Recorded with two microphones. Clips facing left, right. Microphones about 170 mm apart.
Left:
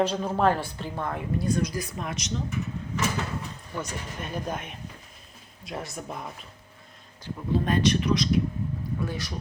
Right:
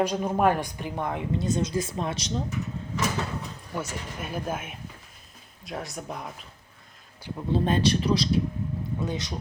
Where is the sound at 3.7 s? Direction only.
5° right (ahead or behind).